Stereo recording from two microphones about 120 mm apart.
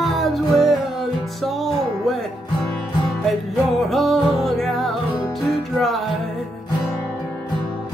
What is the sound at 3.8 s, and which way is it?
Music, centre (ahead or behind).